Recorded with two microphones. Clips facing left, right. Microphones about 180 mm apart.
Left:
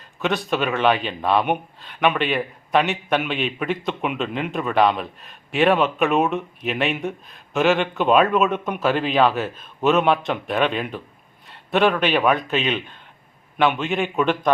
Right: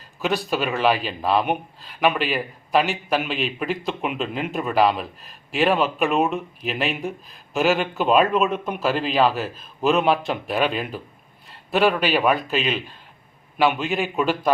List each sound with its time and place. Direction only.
0.2 s speech: centre (ahead or behind)